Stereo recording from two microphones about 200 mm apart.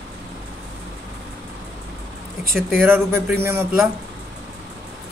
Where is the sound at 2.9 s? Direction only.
10° right (ahead or behind).